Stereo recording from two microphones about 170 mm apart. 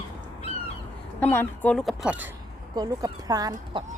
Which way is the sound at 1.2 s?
10° left (ahead or behind).